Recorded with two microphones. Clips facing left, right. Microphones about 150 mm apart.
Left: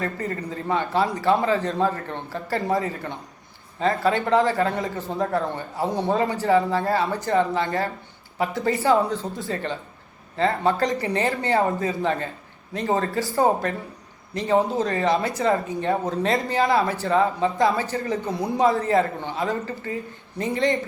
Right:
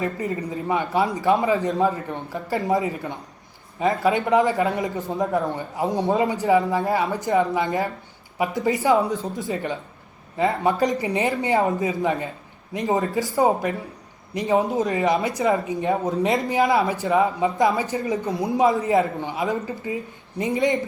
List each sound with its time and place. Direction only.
0.0 s speech: 20° right (ahead or behind)
18.3 s a man's voice: centre (ahead or behind)
18.5 s speech: 20° right (ahead or behind)